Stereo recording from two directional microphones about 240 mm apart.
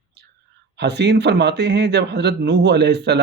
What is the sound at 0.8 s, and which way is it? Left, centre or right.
Speech, right.